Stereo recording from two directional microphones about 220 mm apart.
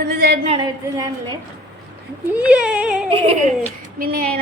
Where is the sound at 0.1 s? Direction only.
45° right (ahead or behind).